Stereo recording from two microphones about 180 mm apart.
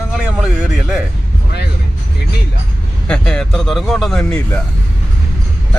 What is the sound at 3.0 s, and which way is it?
Speech, 5° left (ahead or behind).